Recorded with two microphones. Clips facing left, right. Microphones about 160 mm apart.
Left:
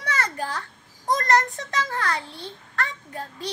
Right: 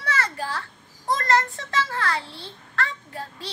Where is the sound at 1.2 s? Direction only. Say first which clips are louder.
Even; 20° left (ahead or behind).